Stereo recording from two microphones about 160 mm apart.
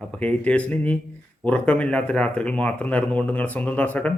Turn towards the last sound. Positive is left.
turn(degrees=10)  # may be behind; listen again after turning